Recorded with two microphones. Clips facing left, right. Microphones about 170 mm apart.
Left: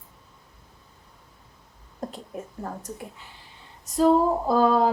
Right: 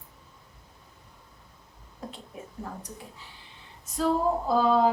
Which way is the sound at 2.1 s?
45° left (ahead or behind).